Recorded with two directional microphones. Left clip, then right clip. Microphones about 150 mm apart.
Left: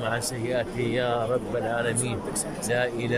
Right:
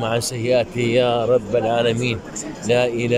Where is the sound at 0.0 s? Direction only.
20° right (ahead or behind).